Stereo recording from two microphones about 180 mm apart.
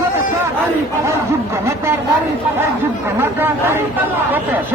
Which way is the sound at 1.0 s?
15° right (ahead or behind).